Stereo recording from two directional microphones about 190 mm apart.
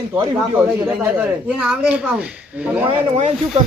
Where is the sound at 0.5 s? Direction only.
10° right (ahead or behind).